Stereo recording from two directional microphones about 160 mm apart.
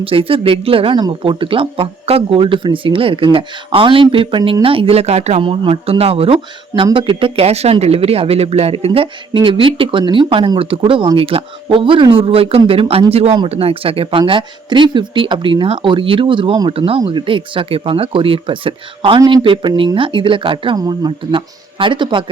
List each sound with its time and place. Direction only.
0.0 s speech: 35° right (ahead or behind)